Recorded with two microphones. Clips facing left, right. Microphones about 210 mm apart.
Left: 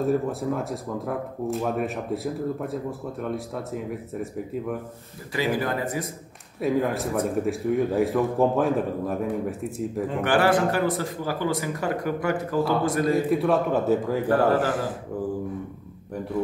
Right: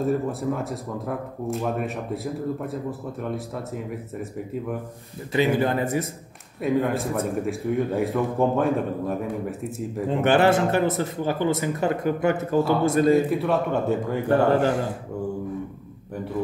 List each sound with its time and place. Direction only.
0.0 s speech: centre (ahead or behind)
5.3 s a man's voice: 25° right (ahead or behind)
6.6 s speech: centre (ahead or behind)
10.1 s a man's voice: 25° right (ahead or behind)
13.3 s speech: centre (ahead or behind)